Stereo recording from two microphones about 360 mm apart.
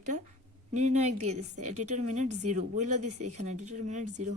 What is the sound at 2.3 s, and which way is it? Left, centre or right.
Speech, right.